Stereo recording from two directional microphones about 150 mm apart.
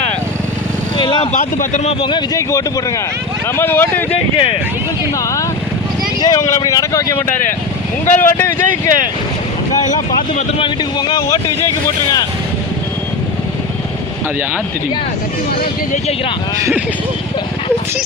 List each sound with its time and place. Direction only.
0.9 s speech: 30° left (ahead or behind)
1.3 s speech: 60° left (ahead or behind); by 2.4 s 30° left (ahead or behind)
3.6 s speech: 15° left (ahead or behind)
4.1 s speech: 35° left (ahead or behind)
6.2 s speech: 25° left (ahead or behind)
8.0 s speech: 55° left (ahead or behind)
8.4 s speech: 15° left (ahead or behind)
10.6 s speech: 30° left (ahead or behind)